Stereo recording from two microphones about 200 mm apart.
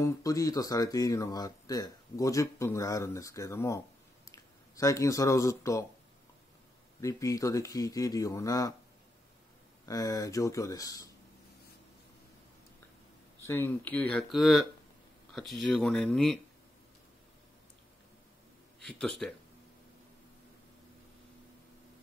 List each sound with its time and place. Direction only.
0.0 s speech: 15° left (ahead or behind)
7.0 s speech: 15° left (ahead or behind)
9.8 s speech: 15° left (ahead or behind)
13.5 s speech: 10° left (ahead or behind)
18.8 s speech: centre (ahead or behind)